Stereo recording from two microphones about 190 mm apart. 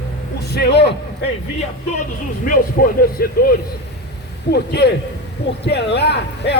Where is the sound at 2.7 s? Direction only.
50° left (ahead or behind).